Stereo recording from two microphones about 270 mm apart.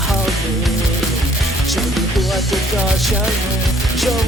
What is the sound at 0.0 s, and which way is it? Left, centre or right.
Music, centre.